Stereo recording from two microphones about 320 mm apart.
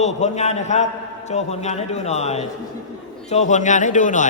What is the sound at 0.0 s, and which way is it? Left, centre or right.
A man's voice, left.